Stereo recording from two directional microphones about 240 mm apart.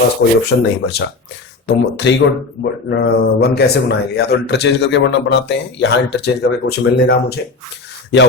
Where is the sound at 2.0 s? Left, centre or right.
Left.